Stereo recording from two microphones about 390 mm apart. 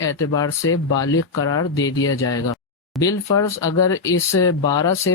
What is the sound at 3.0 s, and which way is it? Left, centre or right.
Speech, centre.